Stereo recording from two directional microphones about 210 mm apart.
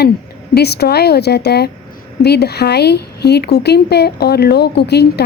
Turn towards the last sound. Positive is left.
turn(degrees=50)  # may be behind; listen again after turning